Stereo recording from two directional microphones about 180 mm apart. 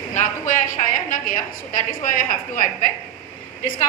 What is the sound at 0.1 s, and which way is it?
Speech, 45° left (ahead or behind).